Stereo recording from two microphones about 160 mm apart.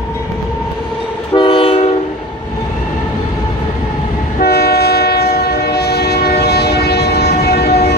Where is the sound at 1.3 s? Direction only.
30° left (ahead or behind).